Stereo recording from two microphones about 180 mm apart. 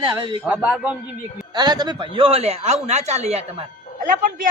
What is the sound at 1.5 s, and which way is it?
Speech, 25° right (ahead or behind).